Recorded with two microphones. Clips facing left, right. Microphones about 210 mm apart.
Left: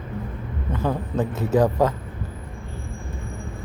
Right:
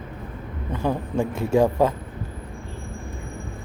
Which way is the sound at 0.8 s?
10° right (ahead or behind).